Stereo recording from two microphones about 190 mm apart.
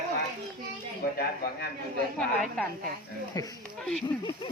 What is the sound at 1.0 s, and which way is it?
Speech, 50° left (ahead or behind).